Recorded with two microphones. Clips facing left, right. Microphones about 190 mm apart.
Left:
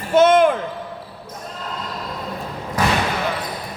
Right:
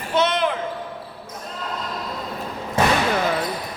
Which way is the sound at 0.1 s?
50° left (ahead or behind).